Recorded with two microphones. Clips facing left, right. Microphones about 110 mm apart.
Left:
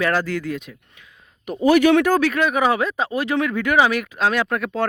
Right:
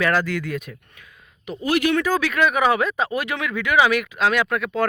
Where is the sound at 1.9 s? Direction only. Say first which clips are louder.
Left 5 dB; 65° left (ahead or behind).